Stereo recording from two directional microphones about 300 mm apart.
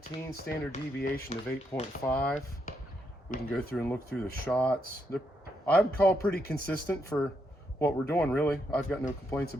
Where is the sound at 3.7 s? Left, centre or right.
Centre.